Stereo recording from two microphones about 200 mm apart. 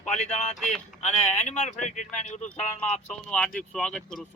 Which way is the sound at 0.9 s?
35° left (ahead or behind).